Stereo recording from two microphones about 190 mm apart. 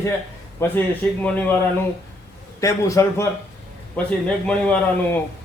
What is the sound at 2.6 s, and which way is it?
A man's voice, 15° left (ahead or behind).